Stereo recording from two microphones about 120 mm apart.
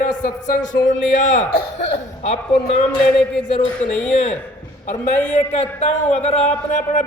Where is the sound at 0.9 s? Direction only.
90° left.